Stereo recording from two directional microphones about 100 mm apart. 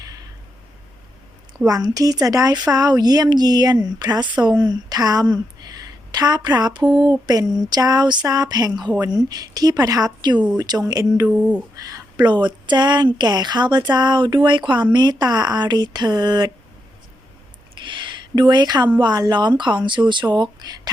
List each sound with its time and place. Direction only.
1.6 s speech: 40° right (ahead or behind)
11.3 s speech: 10° right (ahead or behind)
11.9 s speech: 40° right (ahead or behind)
17.7 s speech: 50° right (ahead or behind)